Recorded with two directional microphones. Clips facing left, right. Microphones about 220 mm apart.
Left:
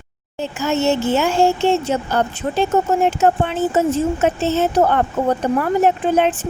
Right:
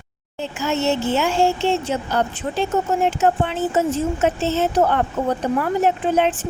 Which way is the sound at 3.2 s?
45° left (ahead or behind).